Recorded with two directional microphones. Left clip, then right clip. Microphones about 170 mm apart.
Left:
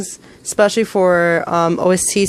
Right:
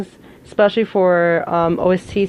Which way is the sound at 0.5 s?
25° left (ahead or behind).